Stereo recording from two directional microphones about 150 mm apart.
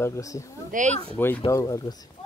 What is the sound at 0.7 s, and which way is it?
Speech, 55° right (ahead or behind).